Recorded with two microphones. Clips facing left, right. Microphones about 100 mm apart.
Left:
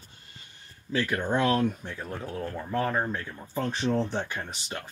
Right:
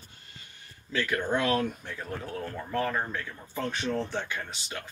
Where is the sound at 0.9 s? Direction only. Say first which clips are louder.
Left 2 dB; 20° left (ahead or behind).